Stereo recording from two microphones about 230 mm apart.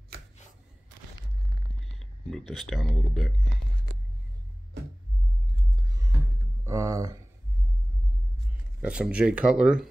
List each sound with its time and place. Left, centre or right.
2.0 s speech: centre
5.9 s a sound: centre
6.6 s speech: centre
8.8 s speech: centre